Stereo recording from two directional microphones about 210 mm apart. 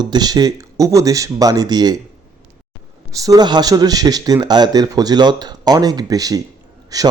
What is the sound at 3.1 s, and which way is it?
Speech, 15° right (ahead or behind).